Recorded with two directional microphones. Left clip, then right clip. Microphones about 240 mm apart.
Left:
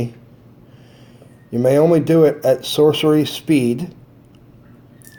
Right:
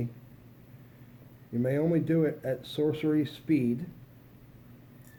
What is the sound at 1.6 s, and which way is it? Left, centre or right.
Speech, left.